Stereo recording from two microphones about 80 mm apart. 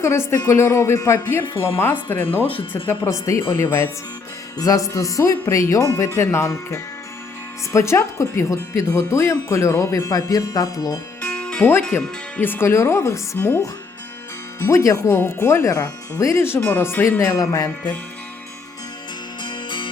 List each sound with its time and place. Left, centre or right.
0.0 s speech: left
3.0 s speech: left
4.5 s speech: left
11.2 s music: centre
11.6 s speech: left
14.6 s speech: left
19.4 s music: left